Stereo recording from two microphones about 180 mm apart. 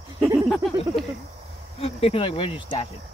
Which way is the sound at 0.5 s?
Centre (ahead or behind).